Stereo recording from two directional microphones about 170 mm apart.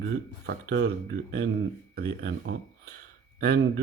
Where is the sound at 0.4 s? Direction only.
70° right (ahead or behind).